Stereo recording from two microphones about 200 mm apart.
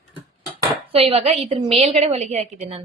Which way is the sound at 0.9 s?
30° right (ahead or behind).